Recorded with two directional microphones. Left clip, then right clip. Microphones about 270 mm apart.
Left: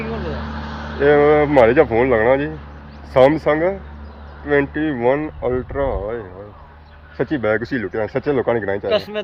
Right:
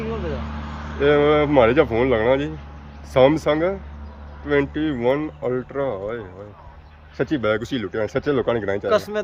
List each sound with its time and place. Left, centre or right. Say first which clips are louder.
0.3 s vehicle: left 4 dB; centre
1.0 s speech: left 4 dB; centre